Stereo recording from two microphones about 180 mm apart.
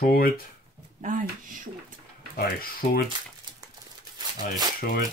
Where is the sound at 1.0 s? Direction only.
45° right (ahead or behind).